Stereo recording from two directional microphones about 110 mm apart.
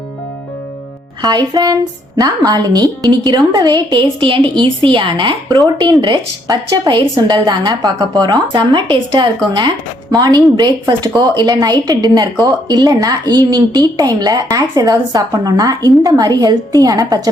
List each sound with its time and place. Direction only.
1.2 s speech: 40° right (ahead or behind)
5.5 s speech: 35° right (ahead or behind)